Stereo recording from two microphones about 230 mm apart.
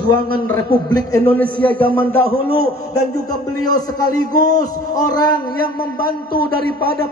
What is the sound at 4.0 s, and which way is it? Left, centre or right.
Speech, right.